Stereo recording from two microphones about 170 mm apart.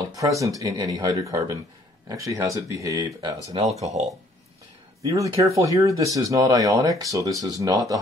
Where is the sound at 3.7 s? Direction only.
40° right (ahead or behind).